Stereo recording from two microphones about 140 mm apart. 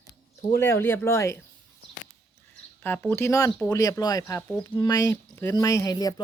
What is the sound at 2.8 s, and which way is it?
Speech, 15° left (ahead or behind).